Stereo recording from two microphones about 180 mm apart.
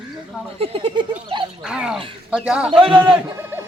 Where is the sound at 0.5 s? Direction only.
30° right (ahead or behind).